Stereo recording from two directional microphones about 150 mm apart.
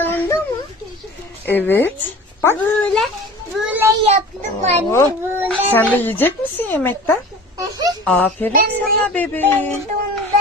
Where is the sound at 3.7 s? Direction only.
15° right (ahead or behind).